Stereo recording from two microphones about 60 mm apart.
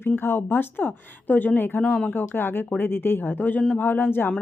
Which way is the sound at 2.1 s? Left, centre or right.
Left.